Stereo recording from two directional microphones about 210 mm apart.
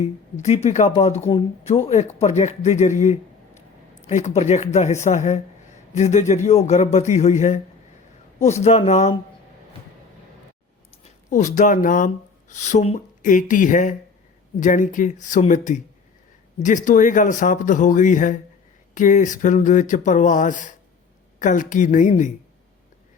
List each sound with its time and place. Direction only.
0.0 s speech: 30° left (ahead or behind)
11.0 s speech: 35° left (ahead or behind)